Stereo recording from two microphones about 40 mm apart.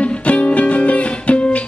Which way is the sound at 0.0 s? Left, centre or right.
Left.